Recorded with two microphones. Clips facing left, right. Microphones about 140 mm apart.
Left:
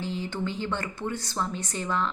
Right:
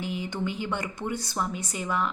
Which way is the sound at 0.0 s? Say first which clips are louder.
Even; 15° right (ahead or behind).